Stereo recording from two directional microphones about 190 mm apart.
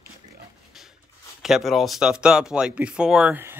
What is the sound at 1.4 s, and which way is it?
Speech, centre (ahead or behind).